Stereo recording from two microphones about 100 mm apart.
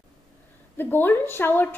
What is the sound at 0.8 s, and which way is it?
Speech, 20° left (ahead or behind).